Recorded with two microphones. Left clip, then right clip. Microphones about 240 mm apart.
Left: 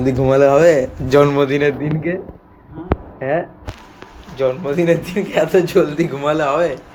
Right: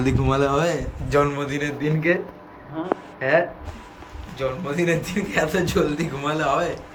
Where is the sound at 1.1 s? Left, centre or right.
Left.